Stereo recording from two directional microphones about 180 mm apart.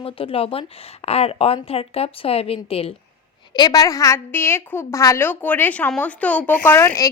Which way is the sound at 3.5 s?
20° left (ahead or behind).